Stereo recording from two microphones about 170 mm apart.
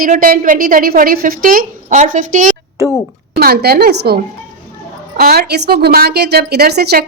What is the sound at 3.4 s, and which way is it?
Speech, 65° right (ahead or behind).